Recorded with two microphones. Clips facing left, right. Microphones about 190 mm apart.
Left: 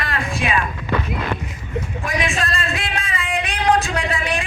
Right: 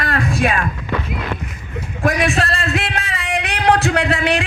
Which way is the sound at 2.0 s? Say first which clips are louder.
Right 8 dB; 70° right (ahead or behind).